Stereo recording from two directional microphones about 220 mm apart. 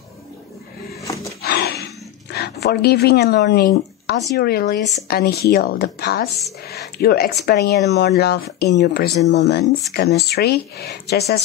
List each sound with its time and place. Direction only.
1.0 s dog: 15° left (ahead or behind)
1.4 s a sound: 45° left (ahead or behind)
2.3 s speech: 45° left (ahead or behind)